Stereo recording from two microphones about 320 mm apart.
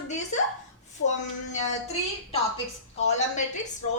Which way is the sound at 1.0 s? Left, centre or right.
Left.